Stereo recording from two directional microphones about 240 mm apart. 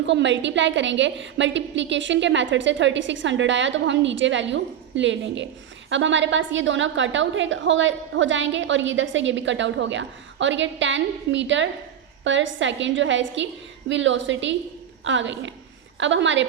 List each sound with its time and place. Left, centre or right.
0.0 s a woman's voice: right